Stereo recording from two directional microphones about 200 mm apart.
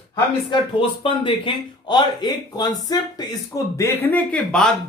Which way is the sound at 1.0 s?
25° left (ahead or behind).